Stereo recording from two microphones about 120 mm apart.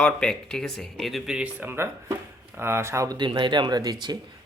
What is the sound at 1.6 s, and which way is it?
Speech, 20° right (ahead or behind).